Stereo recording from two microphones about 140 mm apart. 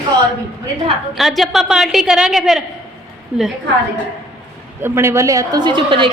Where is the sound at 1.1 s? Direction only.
Centre (ahead or behind).